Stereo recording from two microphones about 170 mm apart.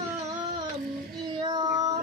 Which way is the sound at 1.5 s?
25° right (ahead or behind).